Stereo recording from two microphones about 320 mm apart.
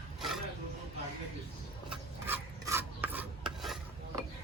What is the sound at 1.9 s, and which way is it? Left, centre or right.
Filing, centre.